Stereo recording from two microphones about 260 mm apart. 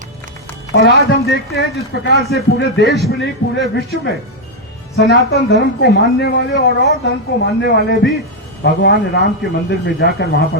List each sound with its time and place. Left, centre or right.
0.7 s a man's voice: left